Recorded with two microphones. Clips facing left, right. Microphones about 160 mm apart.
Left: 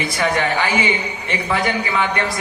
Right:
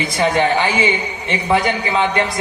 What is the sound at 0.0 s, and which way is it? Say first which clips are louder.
A man's voice: right 3 dB; 25° right (ahead or behind).